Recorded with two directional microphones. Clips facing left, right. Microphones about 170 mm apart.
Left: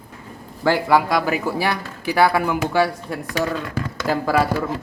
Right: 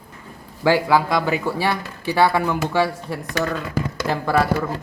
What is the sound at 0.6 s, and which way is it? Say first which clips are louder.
Speech: even; 10° right (ahead or behind).